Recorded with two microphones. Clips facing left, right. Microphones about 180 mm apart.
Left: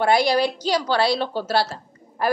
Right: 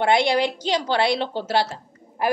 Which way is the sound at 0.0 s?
25° right (ahead or behind).